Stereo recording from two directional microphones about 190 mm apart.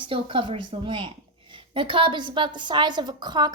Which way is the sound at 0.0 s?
30° right (ahead or behind).